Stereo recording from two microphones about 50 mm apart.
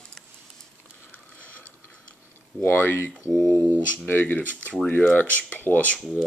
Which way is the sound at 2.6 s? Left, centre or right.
Left.